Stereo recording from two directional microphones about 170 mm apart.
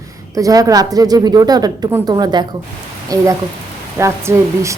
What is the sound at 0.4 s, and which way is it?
Speech, 20° right (ahead or behind).